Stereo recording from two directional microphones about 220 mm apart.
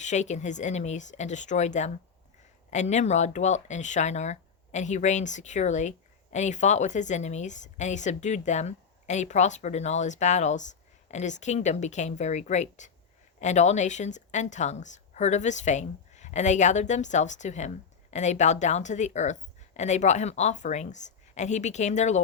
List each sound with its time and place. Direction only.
0.0 s a woman's voice: 35° left (ahead or behind)